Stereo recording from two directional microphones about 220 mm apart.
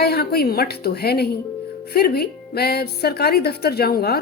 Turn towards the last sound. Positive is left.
turn(degrees=45)  # may be behind; listen again after turning